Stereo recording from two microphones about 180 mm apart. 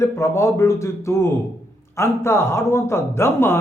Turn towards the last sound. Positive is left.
turn(degrees=15)  # may be behind; listen again after turning